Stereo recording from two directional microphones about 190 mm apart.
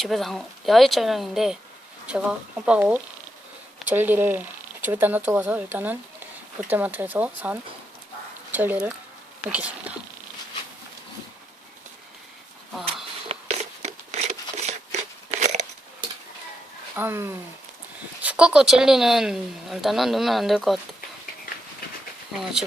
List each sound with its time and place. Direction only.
0.0 s speech: centre (ahead or behind)
13.3 s a sound: 30° right (ahead or behind)
16.9 s speech: 10° right (ahead or behind)
22.3 s speech: centre (ahead or behind)